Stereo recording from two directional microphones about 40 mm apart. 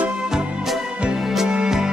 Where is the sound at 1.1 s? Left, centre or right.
Centre.